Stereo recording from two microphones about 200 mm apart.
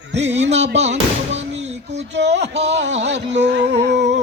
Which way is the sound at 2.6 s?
60° right (ahead or behind).